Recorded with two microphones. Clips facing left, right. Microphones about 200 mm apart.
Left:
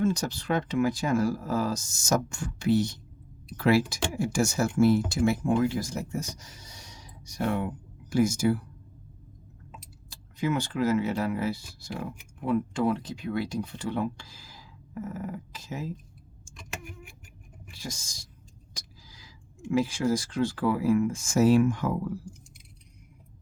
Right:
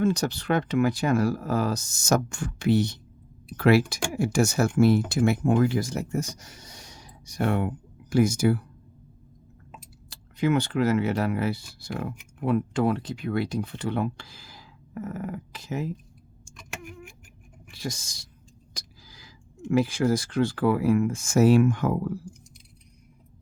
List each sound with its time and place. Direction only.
0.0 s speech: 65° right (ahead or behind)
9.8 s speech: 65° right (ahead or behind)
17.7 s speech: 65° right (ahead or behind)
18.7 s a sound: 65° right (ahead or behind)
19.7 s speech: 60° right (ahead or behind)